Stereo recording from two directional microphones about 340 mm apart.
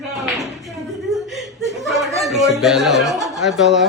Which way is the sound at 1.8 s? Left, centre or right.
Centre.